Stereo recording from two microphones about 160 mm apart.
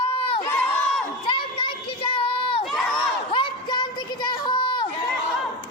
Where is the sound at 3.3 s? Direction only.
30° left (ahead or behind).